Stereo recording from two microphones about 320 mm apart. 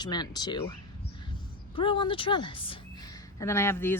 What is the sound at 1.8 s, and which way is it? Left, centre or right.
Speech, centre.